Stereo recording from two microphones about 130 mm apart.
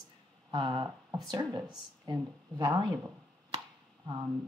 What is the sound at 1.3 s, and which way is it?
Speech, 30° right (ahead or behind).